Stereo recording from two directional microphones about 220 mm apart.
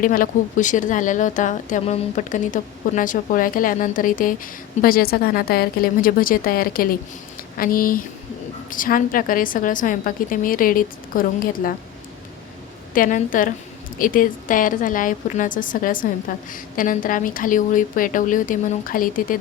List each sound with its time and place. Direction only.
0.0 s a woman's voice: 40° left (ahead or behind)
12.9 s a woman's voice: 40° left (ahead or behind)